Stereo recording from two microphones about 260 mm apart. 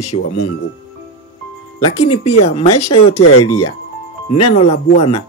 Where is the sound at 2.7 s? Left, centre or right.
Left.